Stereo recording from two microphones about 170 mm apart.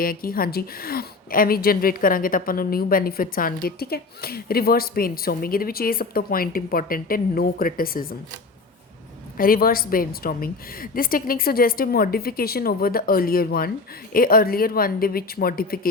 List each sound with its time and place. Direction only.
0.0 s a woman's voice: 60° left (ahead or behind)
9.4 s a woman's voice: 60° left (ahead or behind)